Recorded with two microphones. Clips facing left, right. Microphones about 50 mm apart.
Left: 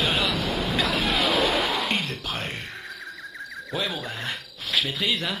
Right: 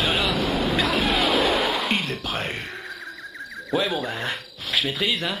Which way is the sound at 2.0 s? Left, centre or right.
Centre.